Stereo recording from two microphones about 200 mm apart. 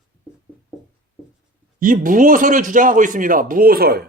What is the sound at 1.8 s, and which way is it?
Speech, 45° right (ahead or behind).